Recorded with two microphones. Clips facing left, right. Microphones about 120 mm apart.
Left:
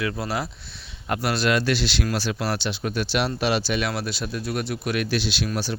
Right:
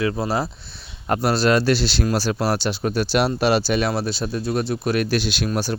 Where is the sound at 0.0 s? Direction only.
30° right (ahead or behind).